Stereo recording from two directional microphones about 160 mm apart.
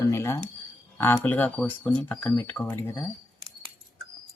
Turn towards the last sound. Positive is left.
turn(degrees=15)  # may be behind; listen again after turning